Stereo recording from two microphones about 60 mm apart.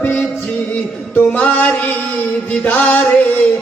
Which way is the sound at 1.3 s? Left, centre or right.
Left.